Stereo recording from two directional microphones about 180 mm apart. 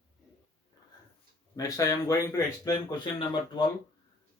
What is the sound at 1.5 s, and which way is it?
Speech, 20° left (ahead or behind).